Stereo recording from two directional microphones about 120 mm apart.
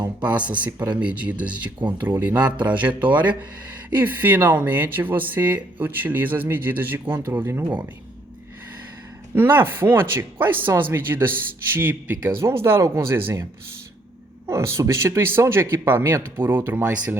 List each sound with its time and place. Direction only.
0.2 s speech: 10° right (ahead or behind)
9.3 s speech: 15° right (ahead or behind)
14.4 s speech: 20° right (ahead or behind)